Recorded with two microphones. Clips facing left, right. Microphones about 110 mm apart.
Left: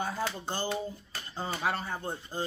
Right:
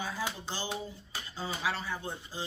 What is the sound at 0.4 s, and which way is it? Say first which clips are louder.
Speech: left 4 dB; 50° left (ahead or behind).